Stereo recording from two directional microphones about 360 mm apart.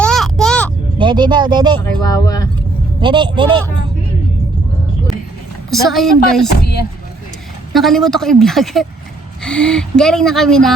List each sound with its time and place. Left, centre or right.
0.0 s a sound: centre
0.9 s speech: centre
1.8 s speech: centre
3.0 s speech: centre
5.7 s speech: centre
6.5 s speech: left
7.7 s speech: centre